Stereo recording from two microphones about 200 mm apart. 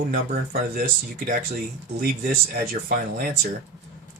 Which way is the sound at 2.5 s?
45° right (ahead or behind).